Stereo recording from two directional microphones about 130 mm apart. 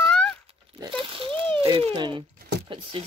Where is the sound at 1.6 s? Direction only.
30° right (ahead or behind).